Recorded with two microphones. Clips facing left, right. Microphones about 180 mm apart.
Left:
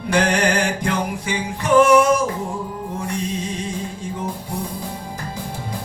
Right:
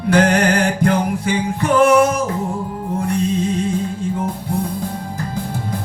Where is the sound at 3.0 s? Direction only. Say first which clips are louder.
Right 8 dB; 55° right (ahead or behind).